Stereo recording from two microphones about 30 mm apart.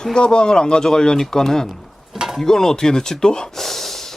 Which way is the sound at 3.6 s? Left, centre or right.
Centre.